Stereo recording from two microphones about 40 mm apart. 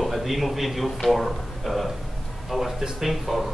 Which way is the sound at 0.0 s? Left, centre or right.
Centre.